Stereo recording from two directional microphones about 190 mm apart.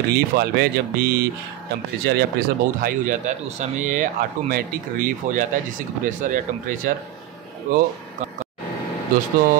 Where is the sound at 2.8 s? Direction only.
45° right (ahead or behind).